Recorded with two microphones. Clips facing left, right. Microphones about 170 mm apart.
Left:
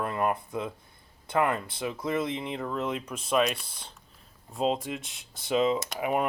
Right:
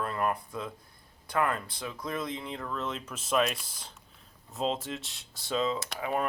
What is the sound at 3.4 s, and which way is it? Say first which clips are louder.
Speech: left 2 dB; centre (ahead or behind).